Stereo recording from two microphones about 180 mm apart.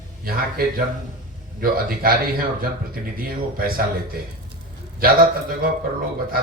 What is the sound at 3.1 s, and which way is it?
A man's voice, 55° right (ahead or behind).